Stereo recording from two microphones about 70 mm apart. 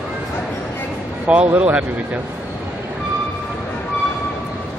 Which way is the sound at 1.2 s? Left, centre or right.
Centre.